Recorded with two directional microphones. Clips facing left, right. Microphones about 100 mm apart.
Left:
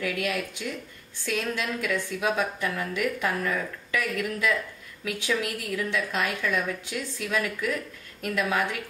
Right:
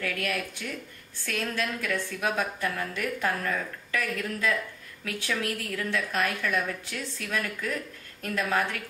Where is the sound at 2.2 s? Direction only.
20° left (ahead or behind).